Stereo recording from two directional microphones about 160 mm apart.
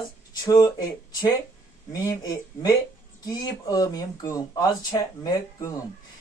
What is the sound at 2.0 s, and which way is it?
Speech, 25° left (ahead or behind).